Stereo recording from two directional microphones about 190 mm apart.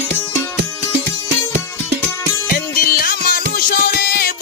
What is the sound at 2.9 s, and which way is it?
Music, 50° left (ahead or behind).